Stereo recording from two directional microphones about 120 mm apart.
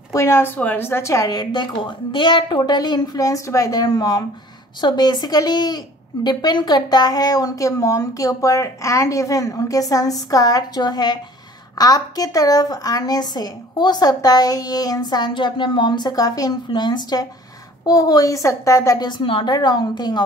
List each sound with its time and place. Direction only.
0.1 s a woman's voice: 25° left (ahead or behind)
19.0 s a woman's voice: 45° left (ahead or behind)